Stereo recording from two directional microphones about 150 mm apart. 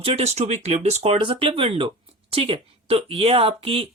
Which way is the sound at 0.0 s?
40° right (ahead or behind).